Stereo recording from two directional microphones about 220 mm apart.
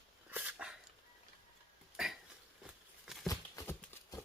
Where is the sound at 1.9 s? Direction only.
Centre (ahead or behind).